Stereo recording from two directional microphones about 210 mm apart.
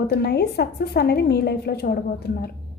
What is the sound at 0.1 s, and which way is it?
A woman's voice, 50° left (ahead or behind).